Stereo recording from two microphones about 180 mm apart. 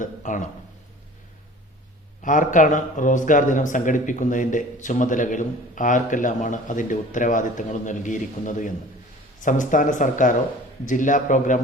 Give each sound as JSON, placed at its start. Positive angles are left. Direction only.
{"t": 0.0, "sound": "speech", "side_deg": 45}
{"t": 2.2, "sound": "a man's voice", "side_deg": 45}